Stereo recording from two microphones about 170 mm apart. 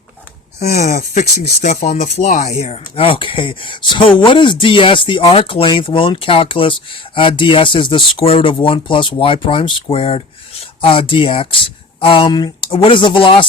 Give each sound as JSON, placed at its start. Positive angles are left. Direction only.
{"t": 0.8, "sound": "speech", "side_deg": 45}